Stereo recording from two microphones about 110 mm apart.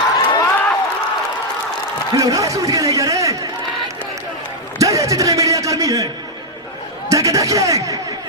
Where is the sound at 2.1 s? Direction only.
30° right (ahead or behind).